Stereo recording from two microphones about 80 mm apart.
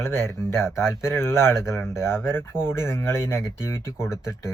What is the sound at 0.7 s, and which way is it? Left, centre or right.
Speech, centre.